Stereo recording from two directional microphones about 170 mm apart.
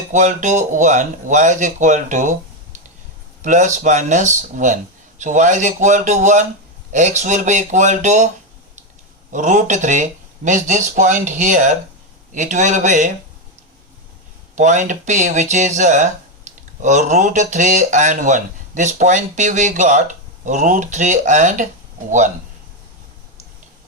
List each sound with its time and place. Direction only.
0.1 s speech: 45° right (ahead or behind)
3.4 s speech: 45° right (ahead or behind)
9.3 s speech: 45° right (ahead or behind)
14.5 s speech: 45° right (ahead or behind)